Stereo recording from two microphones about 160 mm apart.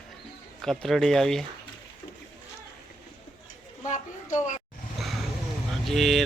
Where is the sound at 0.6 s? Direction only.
Centre (ahead or behind).